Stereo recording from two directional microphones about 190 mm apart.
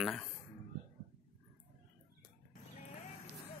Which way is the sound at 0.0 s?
Centre (ahead or behind).